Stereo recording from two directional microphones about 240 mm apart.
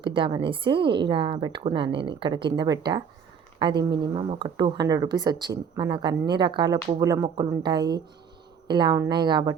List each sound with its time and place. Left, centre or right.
0.0 s a woman's voice: right